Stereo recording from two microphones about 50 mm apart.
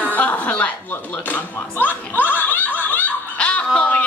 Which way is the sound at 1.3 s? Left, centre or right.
Left.